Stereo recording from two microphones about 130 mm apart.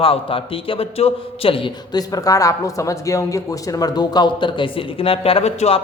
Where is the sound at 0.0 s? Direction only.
45° left (ahead or behind).